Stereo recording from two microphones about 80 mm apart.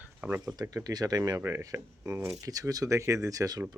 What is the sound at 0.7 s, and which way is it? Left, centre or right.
Speech, right.